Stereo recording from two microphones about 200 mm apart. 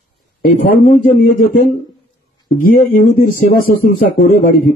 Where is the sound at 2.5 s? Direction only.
45° left (ahead or behind).